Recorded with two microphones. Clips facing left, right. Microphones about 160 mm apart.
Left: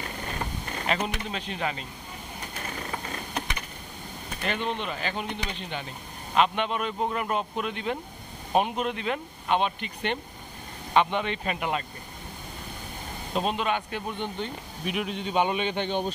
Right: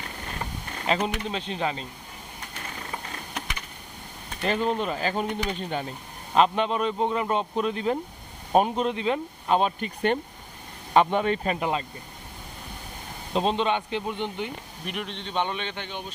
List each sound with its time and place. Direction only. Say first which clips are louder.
0.8 s speech: right 4 dB; 30° right (ahead or behind)
4.5 s speech: right 5 dB; 40° right (ahead or behind)
13.3 s speech: right 3 dB; 25° right (ahead or behind)
14.9 s a man's voice: left 4 dB; 5° left (ahead or behind); by 16.0 s 20° left (ahead or behind)